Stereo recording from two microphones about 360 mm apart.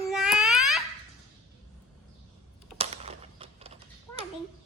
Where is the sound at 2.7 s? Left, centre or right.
Centre.